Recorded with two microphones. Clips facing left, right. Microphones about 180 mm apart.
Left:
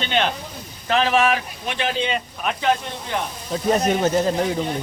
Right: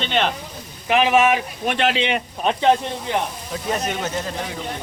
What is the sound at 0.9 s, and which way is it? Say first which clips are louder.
Speech: right 2 dB; 15° right (ahead or behind).